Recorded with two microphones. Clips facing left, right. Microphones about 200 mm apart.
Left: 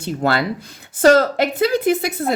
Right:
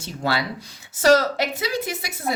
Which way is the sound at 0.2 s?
55° left (ahead or behind).